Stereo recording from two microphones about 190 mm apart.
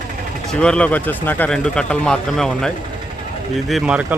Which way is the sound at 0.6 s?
5° left (ahead or behind).